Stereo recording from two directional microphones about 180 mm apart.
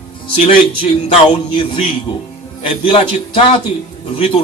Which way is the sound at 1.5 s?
30° left (ahead or behind).